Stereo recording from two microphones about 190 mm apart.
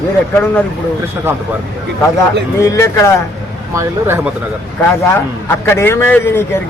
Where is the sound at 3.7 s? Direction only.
15° right (ahead or behind).